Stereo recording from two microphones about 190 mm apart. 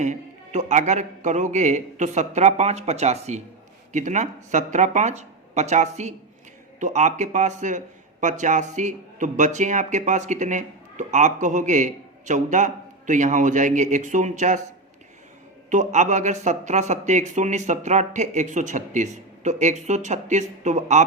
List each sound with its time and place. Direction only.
0.0 s speech: 40° right (ahead or behind)
15.7 s speech: 40° right (ahead or behind)